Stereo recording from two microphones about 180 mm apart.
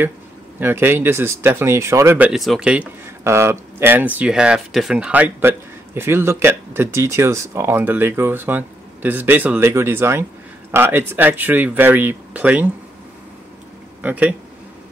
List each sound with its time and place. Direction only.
0.6 s speech: 10° right (ahead or behind)
14.0 s speech: 10° right (ahead or behind)